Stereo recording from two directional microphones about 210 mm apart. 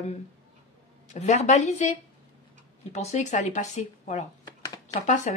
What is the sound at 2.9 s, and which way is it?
Speech, 35° left (ahead or behind).